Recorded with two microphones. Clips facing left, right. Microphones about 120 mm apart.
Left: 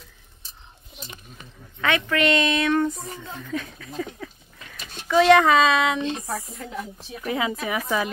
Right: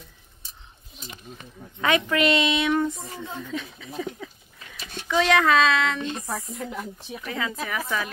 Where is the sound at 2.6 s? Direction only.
5° right (ahead or behind).